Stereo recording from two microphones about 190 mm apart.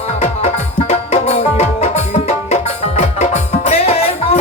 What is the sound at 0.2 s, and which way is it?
Music, 35° left (ahead or behind).